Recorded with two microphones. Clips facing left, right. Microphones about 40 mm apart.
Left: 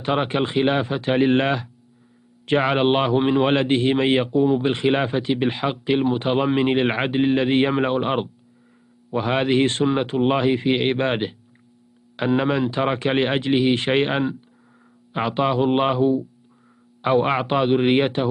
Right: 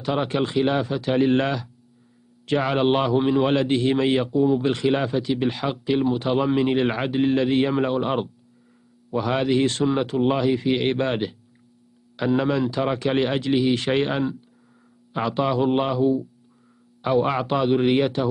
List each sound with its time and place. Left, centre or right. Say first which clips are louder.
0.0 s a man's voice: left 2 dB; left